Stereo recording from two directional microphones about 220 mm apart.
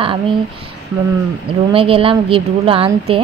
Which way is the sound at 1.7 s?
25° right (ahead or behind).